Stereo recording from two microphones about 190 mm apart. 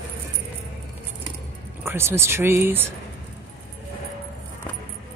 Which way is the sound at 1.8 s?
15° right (ahead or behind).